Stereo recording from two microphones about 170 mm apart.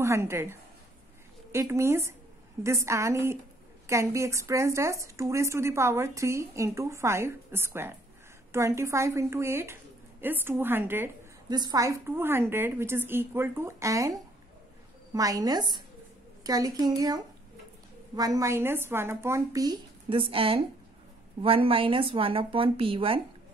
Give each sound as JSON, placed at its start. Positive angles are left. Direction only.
{"t": 0.0, "sound": "a woman's voice", "side_deg": -15}
{"t": 11.4, "sound": "a woman's voice", "side_deg": -25}
{"t": 15.1, "sound": "a woman's voice", "side_deg": -20}